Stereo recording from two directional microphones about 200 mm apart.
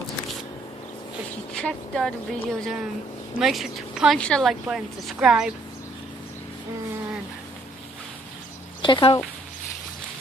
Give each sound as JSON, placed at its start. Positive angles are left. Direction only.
{"t": 1.5, "sound": "speech", "side_deg": 5}
{"t": 8.8, "sound": "speech", "side_deg": 25}